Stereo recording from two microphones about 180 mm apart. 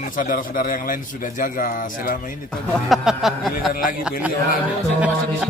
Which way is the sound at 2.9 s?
Centre (ahead or behind).